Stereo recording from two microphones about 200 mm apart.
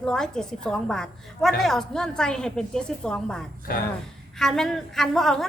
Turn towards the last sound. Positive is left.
turn(degrees=0)  # may be behind; listen again after turning